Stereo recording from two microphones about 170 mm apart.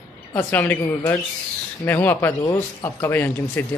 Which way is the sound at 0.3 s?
10° left (ahead or behind).